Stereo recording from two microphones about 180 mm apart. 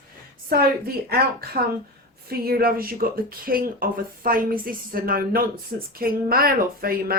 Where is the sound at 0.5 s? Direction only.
55° right (ahead or behind).